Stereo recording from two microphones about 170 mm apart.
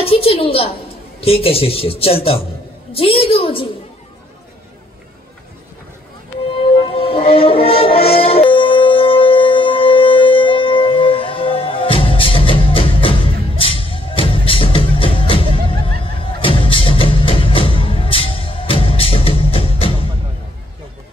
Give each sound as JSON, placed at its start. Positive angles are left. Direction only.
{"t": 0.0, "sound": "a woman's voice", "side_deg": 35}
{"t": 6.6, "sound": "music", "side_deg": 35}